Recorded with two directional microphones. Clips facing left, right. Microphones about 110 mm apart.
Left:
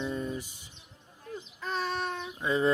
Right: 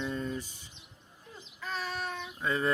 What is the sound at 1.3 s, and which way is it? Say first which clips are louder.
Child singing: left 10 dB; 60° left (ahead or behind).